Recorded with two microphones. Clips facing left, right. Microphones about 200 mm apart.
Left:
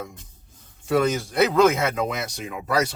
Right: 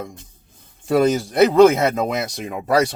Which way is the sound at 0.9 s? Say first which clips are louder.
Right 5 dB; 35° right (ahead or behind).